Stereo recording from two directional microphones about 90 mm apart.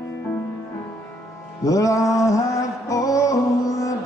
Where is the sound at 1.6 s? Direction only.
35° left (ahead or behind).